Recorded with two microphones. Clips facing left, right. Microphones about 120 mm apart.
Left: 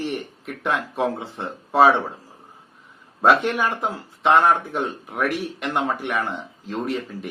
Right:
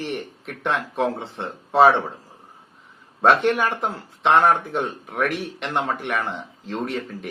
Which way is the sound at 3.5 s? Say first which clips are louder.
Right 2 dB; 5° left (ahead or behind).